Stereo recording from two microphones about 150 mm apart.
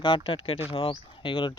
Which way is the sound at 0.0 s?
35° left (ahead or behind).